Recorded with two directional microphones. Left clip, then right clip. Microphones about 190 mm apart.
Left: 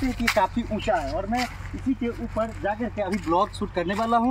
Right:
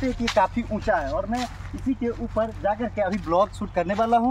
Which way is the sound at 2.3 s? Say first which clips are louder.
Right 3 dB; 5° right (ahead or behind).